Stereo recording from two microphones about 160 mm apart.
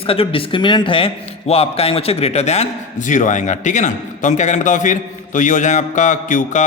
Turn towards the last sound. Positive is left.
turn(degrees=50)  # may be behind; listen again after turning